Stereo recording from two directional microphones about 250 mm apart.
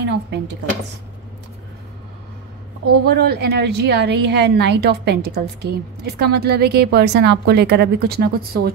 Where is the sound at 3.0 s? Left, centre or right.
Right.